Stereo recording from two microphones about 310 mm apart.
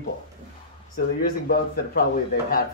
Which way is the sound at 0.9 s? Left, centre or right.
Left.